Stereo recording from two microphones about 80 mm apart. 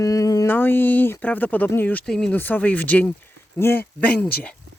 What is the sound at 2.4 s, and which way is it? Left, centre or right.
Speech, left.